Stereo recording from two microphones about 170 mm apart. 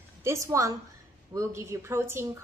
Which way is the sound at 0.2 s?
15° right (ahead or behind).